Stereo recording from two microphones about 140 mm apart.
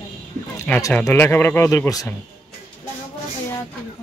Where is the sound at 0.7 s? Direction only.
10° left (ahead or behind).